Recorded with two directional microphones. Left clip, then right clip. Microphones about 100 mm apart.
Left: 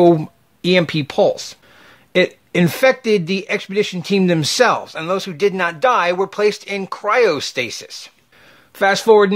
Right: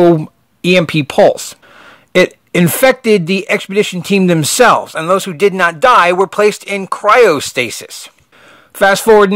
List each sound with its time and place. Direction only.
0.6 s speech: 45° right (ahead or behind); by 1.9 s 60° right (ahead or behind)
2.1 s speech: 45° right (ahead or behind); by 6.3 s 70° right (ahead or behind)
6.3 s speech: 55° right (ahead or behind)
8.7 s speech: 50° right (ahead or behind)